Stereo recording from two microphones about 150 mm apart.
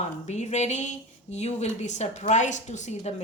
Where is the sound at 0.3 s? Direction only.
50° left (ahead or behind).